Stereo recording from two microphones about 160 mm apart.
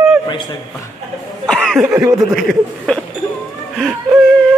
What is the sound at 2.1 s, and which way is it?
Speech, centre (ahead or behind).